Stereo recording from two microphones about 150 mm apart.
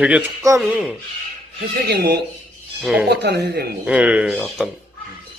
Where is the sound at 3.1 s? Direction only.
90° right.